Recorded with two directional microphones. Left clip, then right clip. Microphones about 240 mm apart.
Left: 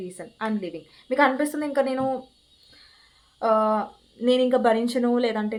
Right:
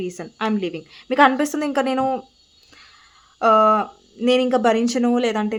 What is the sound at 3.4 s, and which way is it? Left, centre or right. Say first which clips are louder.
A woman's voice: right 7 dB; right.